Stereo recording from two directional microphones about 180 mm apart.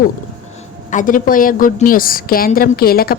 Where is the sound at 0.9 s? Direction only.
45° left (ahead or behind).